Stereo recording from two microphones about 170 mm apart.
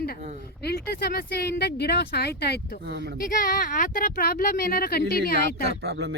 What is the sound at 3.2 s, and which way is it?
Speech, 55° left (ahead or behind).